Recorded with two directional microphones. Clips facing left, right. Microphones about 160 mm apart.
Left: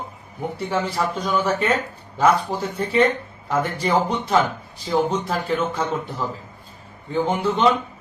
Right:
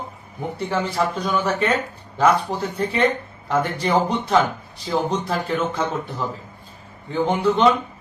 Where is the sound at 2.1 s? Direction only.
5° left (ahead or behind).